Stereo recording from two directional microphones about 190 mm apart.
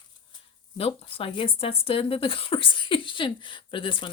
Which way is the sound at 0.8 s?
30° left (ahead or behind).